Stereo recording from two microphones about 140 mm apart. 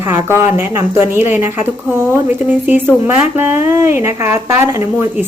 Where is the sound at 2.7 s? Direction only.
15° right (ahead or behind).